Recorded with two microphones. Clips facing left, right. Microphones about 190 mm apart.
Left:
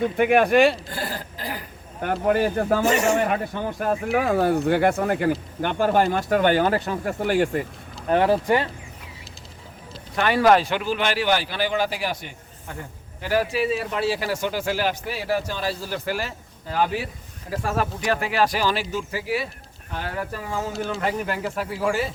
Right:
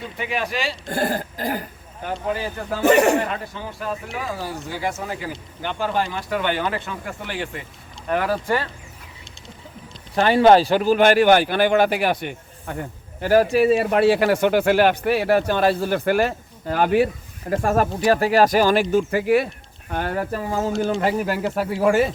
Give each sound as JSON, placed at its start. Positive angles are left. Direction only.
{"t": 0.0, "sound": "speech", "side_deg": 55}
{"t": 0.9, "sound": "throat clearing", "side_deg": -50}
{"t": 2.2, "sound": "speech", "side_deg": 60}
{"t": 2.8, "sound": "a man's voice", "side_deg": -60}
{"t": 3.5, "sound": "speech", "side_deg": 55}
{"t": 8.1, "sound": "speech", "side_deg": 25}
{"t": 10.2, "sound": "speech", "side_deg": -30}
{"t": 13.2, "sound": "a man's voice", "side_deg": -45}
{"t": 18.0, "sound": "speech", "side_deg": -35}